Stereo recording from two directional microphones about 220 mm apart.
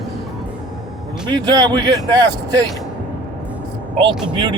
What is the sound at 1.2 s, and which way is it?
Speech, 20° right (ahead or behind).